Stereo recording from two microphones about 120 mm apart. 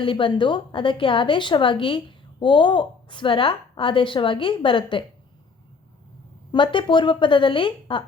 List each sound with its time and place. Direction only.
0.0 s a woman's voice: 45° left (ahead or behind)
6.5 s a woman's voice: 45° left (ahead or behind)